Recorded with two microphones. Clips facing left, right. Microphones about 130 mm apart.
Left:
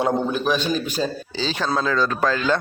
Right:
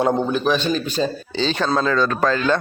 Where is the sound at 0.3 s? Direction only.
5° left (ahead or behind).